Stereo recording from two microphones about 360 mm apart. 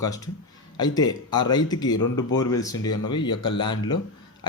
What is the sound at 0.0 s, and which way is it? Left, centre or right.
Speech, centre.